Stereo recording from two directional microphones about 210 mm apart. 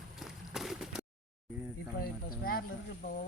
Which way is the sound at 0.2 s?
Centre (ahead or behind).